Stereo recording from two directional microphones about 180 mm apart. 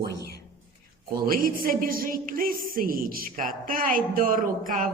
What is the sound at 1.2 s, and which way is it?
A woman's voice, 55° right (ahead or behind).